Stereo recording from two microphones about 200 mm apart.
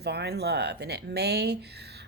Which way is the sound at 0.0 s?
55° right (ahead or behind).